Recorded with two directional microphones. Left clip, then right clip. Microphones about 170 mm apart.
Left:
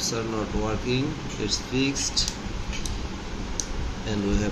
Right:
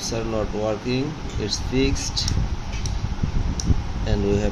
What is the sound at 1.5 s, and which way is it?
Speech, 50° right (ahead or behind).